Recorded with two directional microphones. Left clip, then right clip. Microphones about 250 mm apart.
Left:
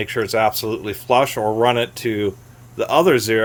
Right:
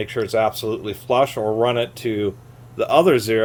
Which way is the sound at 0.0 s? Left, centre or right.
Left.